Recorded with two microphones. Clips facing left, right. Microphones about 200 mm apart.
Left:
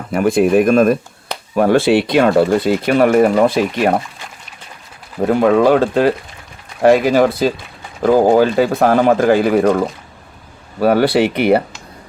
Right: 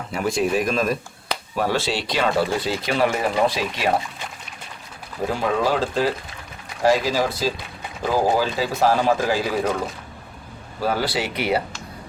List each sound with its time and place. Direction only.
0.1 s speech: 55° left (ahead or behind)
5.2 s speech: 60° left (ahead or behind)
10.8 s speech: 65° left (ahead or behind)